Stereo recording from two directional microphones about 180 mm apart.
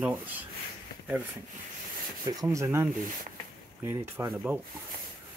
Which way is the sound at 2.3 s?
20° right (ahead or behind).